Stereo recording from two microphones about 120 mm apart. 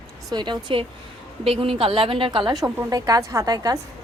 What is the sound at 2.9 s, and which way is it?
Speech, 30° right (ahead or behind).